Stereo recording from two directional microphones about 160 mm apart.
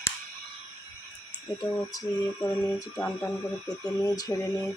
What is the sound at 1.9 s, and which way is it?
Speech, 20° left (ahead or behind).